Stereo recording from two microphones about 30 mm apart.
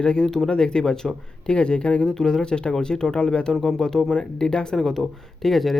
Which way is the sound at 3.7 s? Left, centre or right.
Left.